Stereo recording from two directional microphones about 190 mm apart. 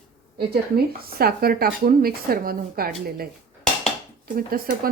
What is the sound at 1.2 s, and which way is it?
Cutlery, 55° right (ahead or behind).